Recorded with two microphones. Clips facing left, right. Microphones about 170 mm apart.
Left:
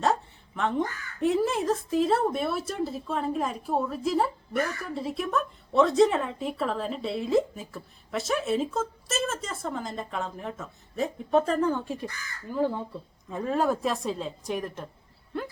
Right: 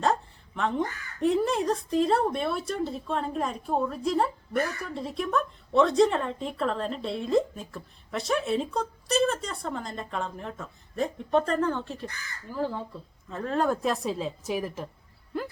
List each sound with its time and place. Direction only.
0.0 s speech: centre (ahead or behind)